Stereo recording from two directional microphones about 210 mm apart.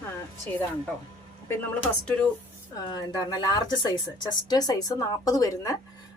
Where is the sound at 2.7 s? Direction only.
20° left (ahead or behind).